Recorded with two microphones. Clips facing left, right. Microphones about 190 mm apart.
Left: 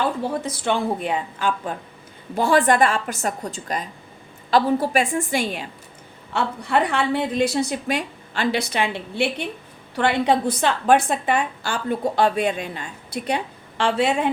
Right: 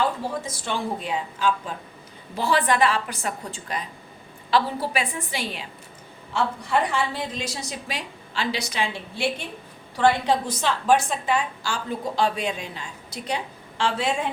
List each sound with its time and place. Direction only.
0.4 s a woman's voice: 60° left (ahead or behind)
6.3 s a woman's voice: 60° left (ahead or behind)